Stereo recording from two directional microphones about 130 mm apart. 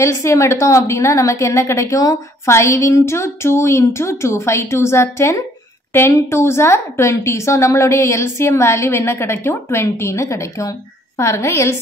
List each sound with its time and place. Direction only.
0.0 s a woman's voice: 20° left (ahead or behind)